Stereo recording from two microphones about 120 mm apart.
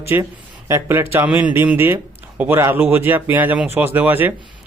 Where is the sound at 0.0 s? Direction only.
20° right (ahead or behind).